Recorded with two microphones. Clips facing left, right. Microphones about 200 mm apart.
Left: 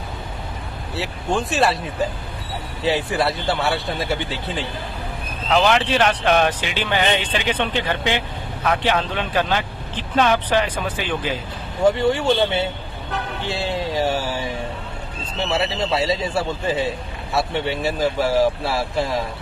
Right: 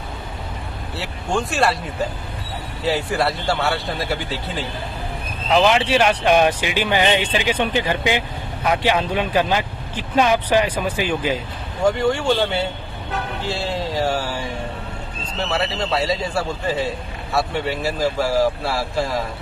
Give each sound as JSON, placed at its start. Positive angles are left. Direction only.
{"t": 0.9, "sound": "speech", "side_deg": 0}
{"t": 2.8, "sound": "speech", "side_deg": 0}
{"t": 11.9, "sound": "speech", "side_deg": 5}
{"t": 15.4, "sound": "speech", "side_deg": 25}
{"t": 15.9, "sound": "speech", "side_deg": 0}